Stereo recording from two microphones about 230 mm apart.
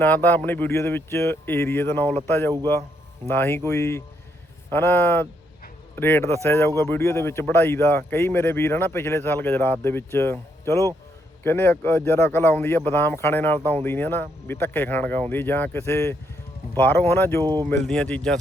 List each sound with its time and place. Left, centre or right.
0.0 s speech: centre
3.2 s speech: centre
17.4 s speech: centre
17.7 s speech: centre